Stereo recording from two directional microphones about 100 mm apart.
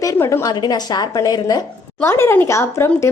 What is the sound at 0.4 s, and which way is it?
A woman's voice, 45° left (ahead or behind).